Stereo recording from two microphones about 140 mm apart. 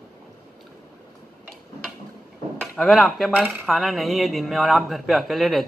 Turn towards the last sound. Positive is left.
turn(degrees=0)  # may be behind; listen again after turning